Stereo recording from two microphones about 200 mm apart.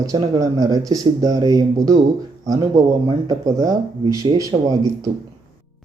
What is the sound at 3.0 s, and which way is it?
Speech, 20° right (ahead or behind).